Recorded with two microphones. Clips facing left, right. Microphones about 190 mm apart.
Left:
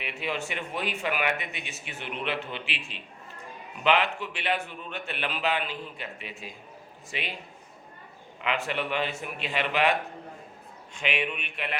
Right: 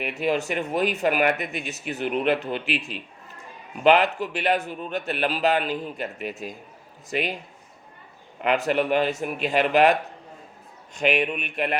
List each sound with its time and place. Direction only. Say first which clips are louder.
0.0 s a man's voice: right 8 dB; 40° right (ahead or behind)
8.4 s speech: right 8 dB; 40° right (ahead or behind)